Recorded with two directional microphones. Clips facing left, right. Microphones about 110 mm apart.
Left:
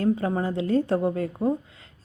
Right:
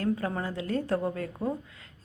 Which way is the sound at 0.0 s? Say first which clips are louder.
Left 6 dB; 25° left (ahead or behind).